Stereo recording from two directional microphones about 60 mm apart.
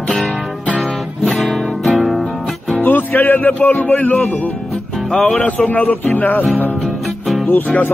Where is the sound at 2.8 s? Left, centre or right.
Left.